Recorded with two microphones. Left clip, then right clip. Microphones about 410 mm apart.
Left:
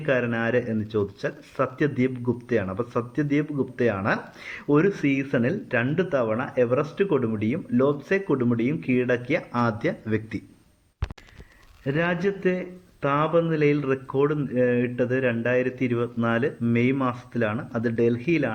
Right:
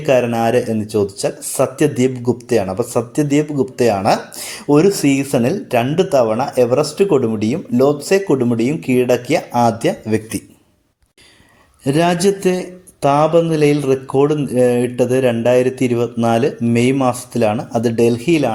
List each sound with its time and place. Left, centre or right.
0.0 s speech: left
11.9 s speech: left